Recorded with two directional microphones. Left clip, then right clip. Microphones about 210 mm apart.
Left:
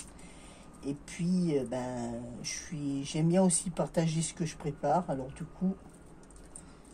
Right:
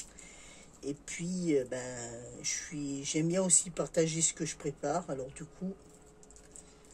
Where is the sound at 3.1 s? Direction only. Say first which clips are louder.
Left 1 dB; 50° right (ahead or behind).